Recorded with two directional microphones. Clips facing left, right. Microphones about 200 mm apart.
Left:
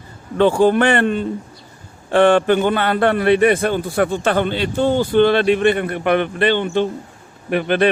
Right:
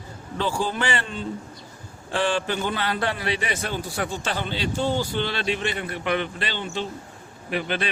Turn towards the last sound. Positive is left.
turn(degrees=55)  # may be behind; listen again after turning